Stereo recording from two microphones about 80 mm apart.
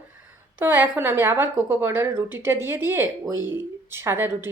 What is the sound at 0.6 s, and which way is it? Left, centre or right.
A woman's voice, right.